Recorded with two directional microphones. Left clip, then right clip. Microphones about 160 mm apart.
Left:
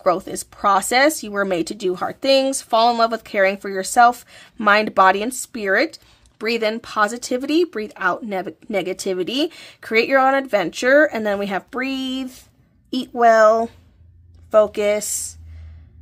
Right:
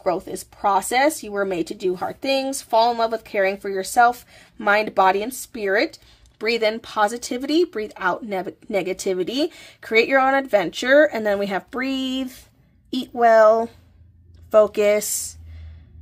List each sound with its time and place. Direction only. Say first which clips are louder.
0.0 s speech: left 4 dB; 35° left (ahead or behind); by 12.3 s centre (ahead or behind)
12.9 s speech: left 1 dB; 15° left (ahead or behind)
14.5 s speech: even; centre (ahead or behind)